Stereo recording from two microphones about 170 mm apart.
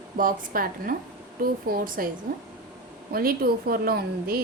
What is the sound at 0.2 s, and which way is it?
A woman's voice, 55° right (ahead or behind).